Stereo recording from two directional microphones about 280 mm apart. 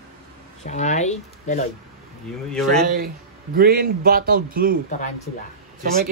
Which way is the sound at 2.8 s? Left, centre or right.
Right.